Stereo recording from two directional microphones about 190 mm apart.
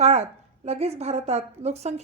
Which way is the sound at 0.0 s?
35° right (ahead or behind).